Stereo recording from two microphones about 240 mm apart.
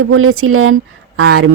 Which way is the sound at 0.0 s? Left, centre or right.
Right.